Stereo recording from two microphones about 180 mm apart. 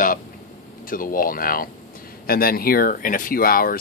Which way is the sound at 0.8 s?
50° left (ahead or behind).